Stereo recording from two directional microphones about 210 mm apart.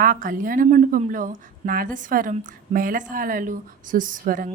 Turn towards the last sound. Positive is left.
turn(degrees=-40)  # may be behind; listen again after turning